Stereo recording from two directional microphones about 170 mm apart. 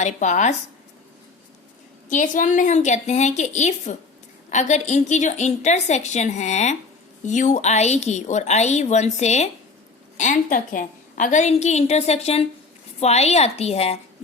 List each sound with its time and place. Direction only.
0.0 s a woman's voice: 45° left (ahead or behind)
2.0 s a woman's voice: 50° left (ahead or behind)